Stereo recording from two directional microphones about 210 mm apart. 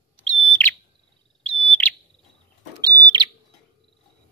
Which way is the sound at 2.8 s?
20° right (ahead or behind).